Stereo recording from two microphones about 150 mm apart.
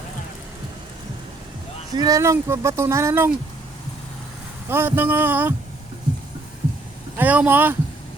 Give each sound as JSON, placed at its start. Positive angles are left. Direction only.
{"t": 1.9, "sound": "speech", "side_deg": -25}
{"t": 4.7, "sound": "speech", "side_deg": -15}
{"t": 7.2, "sound": "speech", "side_deg": -10}